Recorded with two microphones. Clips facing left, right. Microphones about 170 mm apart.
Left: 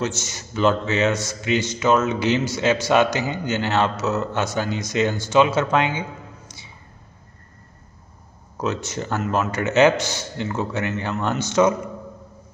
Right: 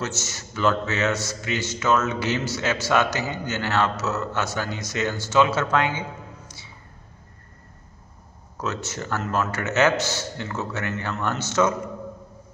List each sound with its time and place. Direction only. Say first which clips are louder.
0.0 s a man's voice: left 4 dB; 15° left (ahead or behind)
8.5 s a man's voice: left 4 dB; 15° left (ahead or behind)